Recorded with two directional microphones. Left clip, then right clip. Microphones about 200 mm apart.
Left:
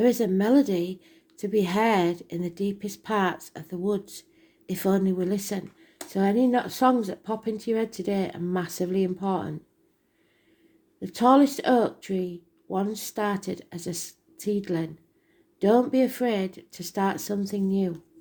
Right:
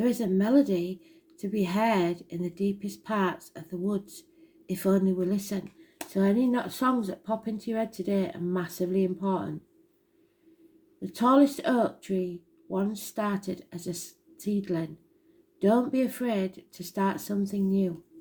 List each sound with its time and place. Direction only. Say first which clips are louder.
0.0 s a woman's voice: left 5 dB; 40° left (ahead or behind)
11.0 s a woman's voice: left 3 dB; 40° left (ahead or behind)